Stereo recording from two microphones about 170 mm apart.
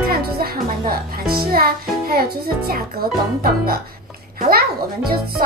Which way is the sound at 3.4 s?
65° right (ahead or behind).